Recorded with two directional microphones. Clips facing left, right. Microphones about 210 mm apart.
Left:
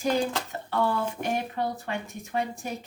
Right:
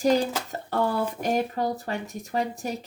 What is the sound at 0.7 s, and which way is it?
Speech, 40° right (ahead or behind).